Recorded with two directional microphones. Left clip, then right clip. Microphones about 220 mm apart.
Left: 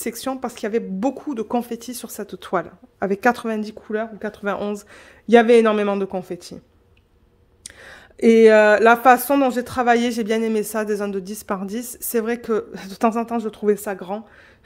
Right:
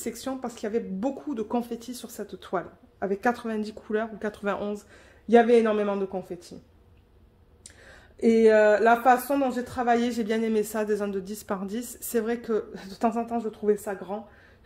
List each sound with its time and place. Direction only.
0.0 s speech: 40° left (ahead or behind)
3.8 s speech: 20° left (ahead or behind); by 6.5 s 45° left (ahead or behind)
7.6 s speech: 45° left (ahead or behind)